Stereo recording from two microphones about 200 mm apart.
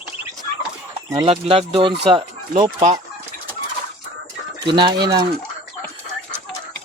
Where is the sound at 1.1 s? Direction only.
25° right (ahead or behind).